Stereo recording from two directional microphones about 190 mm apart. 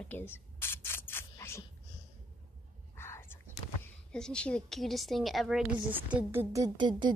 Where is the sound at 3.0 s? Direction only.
10° left (ahead or behind).